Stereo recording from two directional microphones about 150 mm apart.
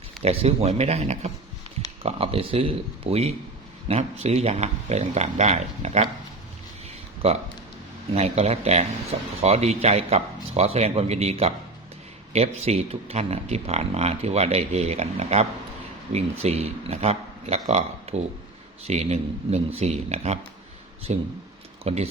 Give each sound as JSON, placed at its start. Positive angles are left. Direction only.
{"t": 0.2, "sound": "speech", "side_deg": -45}
{"t": 7.2, "sound": "speech", "side_deg": -45}